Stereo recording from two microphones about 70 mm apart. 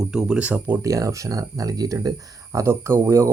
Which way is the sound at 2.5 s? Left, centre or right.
Right.